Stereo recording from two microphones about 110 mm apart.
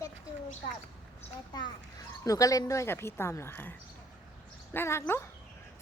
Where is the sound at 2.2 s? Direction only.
30° left (ahead or behind).